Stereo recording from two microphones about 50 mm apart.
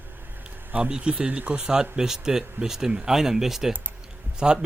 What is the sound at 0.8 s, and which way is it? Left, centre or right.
Speech, right.